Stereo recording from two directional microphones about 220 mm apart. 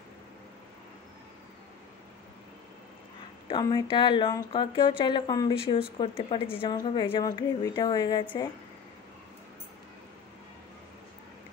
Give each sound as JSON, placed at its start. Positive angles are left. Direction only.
{"t": 3.4, "sound": "a woman's voice", "side_deg": 20}